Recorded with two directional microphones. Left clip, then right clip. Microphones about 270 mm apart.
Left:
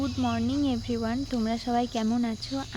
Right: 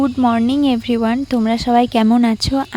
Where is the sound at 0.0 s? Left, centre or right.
Right.